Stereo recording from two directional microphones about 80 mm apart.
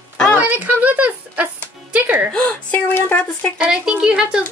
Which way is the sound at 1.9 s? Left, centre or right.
Right.